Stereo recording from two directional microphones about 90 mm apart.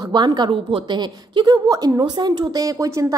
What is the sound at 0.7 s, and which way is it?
Speech, 90° right.